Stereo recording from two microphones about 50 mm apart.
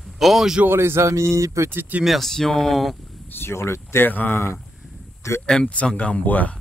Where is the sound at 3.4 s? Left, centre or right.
Left.